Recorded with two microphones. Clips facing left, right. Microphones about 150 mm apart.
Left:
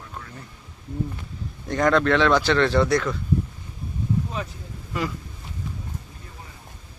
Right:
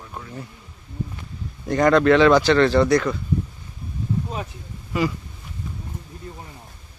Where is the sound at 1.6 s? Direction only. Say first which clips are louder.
Right 4 dB; centre (ahead or behind).